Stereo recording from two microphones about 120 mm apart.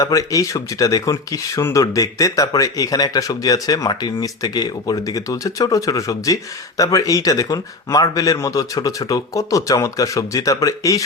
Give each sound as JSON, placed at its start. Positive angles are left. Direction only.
{"t": 0.0, "sound": "speech", "side_deg": 30}